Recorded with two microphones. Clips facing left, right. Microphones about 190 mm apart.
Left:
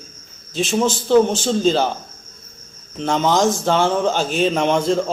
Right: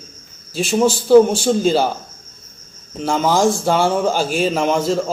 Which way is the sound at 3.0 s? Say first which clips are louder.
Right 1 dB; 5° right (ahead or behind).